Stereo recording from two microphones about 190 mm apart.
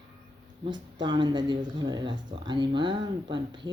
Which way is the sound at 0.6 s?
25° right (ahead or behind).